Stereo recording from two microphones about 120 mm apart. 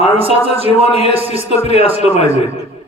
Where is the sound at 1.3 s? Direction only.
65° left (ahead or behind).